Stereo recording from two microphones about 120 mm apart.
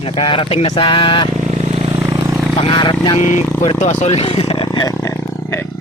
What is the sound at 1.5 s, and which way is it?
Vehicle, 65° right (ahead or behind).